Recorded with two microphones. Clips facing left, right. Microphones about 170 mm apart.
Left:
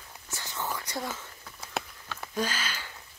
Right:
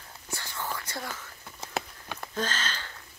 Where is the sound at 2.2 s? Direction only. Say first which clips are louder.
Left 1 dB; 10° left (ahead or behind).